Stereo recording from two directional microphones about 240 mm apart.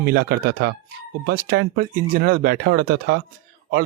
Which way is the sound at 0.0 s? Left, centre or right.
Right.